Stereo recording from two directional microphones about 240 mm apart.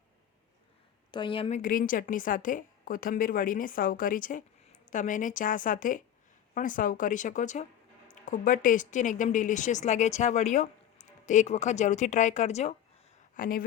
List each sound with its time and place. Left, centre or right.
1.1 s a woman's voice: centre; by 13.7 s left